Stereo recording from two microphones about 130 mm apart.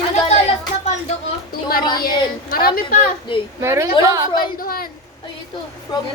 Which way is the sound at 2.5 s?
90° left.